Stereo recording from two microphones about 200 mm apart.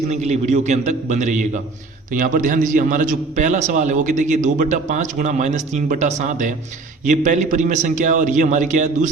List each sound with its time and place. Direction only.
0.1 s a man's voice: 35° right (ahead or behind)